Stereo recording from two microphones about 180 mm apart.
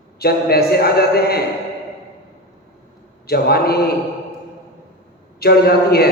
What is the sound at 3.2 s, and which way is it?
Speech, 60° left (ahead or behind).